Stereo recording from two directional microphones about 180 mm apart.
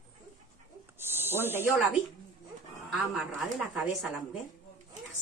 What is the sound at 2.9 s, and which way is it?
Speech, 5° right (ahead or behind).